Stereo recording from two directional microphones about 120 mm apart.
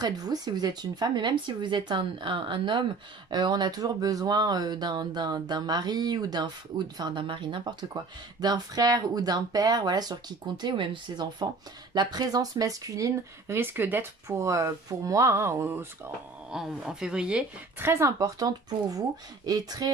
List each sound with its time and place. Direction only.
0.0 s speech: 35° right (ahead or behind)
13.6 s speech: 15° right (ahead or behind)
16.5 s a woman's voice: 5° right (ahead or behind)
17.8 s speech: 20° right (ahead or behind)